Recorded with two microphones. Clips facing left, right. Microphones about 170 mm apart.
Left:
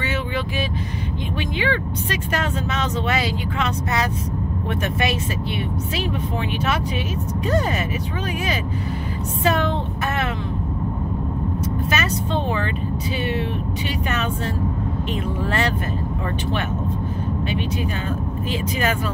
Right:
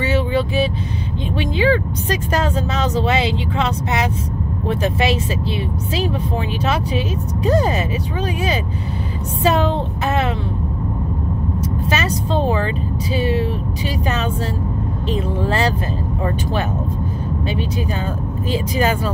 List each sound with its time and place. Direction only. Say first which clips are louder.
1.6 s speech: right 8 dB; 35° right (ahead or behind)
7.4 s speech: right 5 dB; 30° right (ahead or behind)
9.4 s speech: right 4 dB; 30° right (ahead or behind)
11.9 s speech: right 4 dB; 35° right (ahead or behind)
15.4 s speech: right 3 dB; 30° right (ahead or behind)
18.5 s speech: right 5 dB; 35° right (ahead or behind)